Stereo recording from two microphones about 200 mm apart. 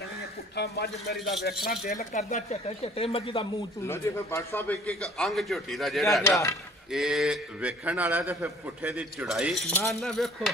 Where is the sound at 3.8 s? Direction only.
10° left (ahead or behind).